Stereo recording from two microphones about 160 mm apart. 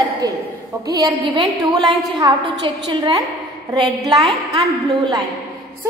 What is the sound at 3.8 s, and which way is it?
A woman's voice, 25° right (ahead or behind).